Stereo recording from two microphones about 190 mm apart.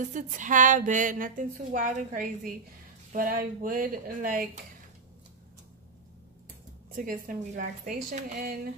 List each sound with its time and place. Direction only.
0.0 s a woman's voice: 40° right (ahead or behind)
6.9 s a woman's voice: 45° right (ahead or behind)